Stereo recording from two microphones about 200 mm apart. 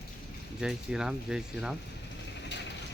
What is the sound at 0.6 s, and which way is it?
Speech, 5° right (ahead or behind).